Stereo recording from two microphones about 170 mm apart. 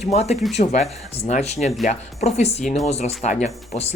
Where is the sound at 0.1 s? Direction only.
40° left (ahead or behind).